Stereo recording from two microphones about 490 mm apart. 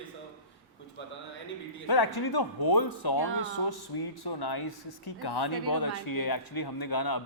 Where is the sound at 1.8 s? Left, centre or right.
Left.